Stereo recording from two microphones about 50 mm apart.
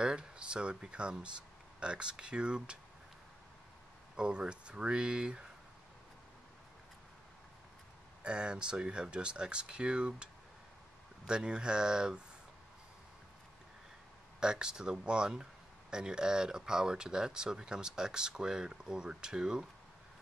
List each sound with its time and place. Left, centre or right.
0.0 s speech: centre
4.2 s speech: centre
8.2 s speech: centre
14.4 s speech: centre